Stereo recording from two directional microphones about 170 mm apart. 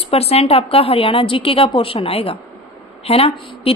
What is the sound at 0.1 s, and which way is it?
A woman's voice, 35° left (ahead or behind).